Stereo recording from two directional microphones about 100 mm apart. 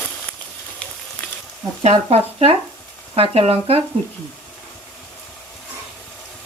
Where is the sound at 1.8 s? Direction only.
90° right.